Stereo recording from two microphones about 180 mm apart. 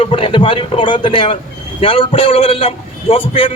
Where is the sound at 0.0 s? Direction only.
30° left (ahead or behind).